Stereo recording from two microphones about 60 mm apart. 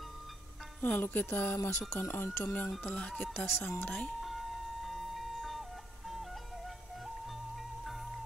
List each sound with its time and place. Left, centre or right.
0.7 s music: left
1.6 s speech: left
2.0 s music: left
2.4 s speech: left
3.3 s music: left
3.8 s speech: left
4.2 s music: centre